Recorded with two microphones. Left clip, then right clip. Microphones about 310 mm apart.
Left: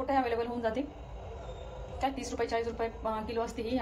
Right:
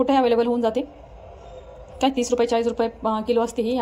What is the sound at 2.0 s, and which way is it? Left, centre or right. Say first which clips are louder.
A woman's voice: right 13 dB; centre.